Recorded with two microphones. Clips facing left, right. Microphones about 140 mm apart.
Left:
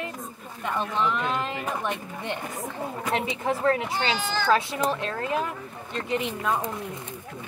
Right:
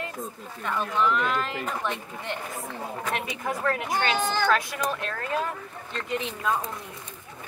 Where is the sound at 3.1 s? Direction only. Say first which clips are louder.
Left 7 dB; 25° left (ahead or behind).